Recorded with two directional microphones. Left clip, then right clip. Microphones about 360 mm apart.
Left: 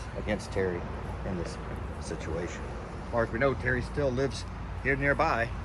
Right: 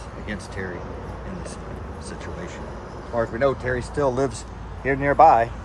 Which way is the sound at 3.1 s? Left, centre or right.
Centre.